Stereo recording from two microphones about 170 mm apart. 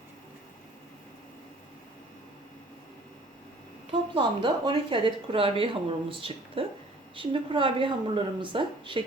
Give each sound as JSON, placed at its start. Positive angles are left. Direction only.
{"t": 4.1, "sound": "a woman's voice", "side_deg": -30}